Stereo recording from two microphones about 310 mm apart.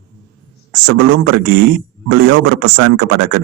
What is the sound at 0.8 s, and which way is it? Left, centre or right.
Speech, right.